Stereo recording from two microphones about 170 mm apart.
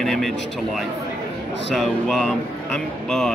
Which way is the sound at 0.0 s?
Centre (ahead or behind).